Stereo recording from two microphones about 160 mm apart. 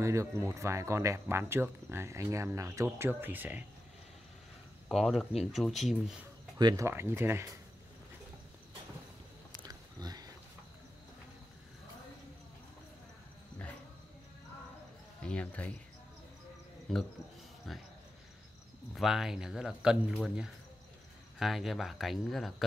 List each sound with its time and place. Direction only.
0.0 s speech: 20° right (ahead or behind)
4.8 s speech: centre (ahead or behind)
6.6 s speech: 20° right (ahead or behind)
9.6 s a sound: 25° right (ahead or behind)
15.2 s speech: 10° left (ahead or behind)
16.9 s speech: centre (ahead or behind)
18.9 s speech: centre (ahead or behind)